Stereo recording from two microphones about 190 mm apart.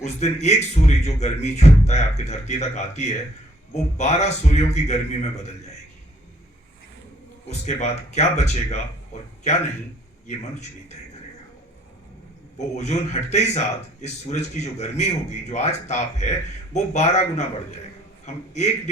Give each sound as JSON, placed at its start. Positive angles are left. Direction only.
{"t": 0.0, "sound": "speech", "side_deg": 35}
{"t": 7.6, "sound": "speech", "side_deg": 35}
{"t": 10.2, "sound": "speech", "side_deg": 35}
{"t": 12.5, "sound": "speech", "side_deg": 35}